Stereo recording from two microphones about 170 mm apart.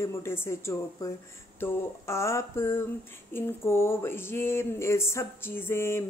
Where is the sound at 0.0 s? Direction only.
15° left (ahead or behind).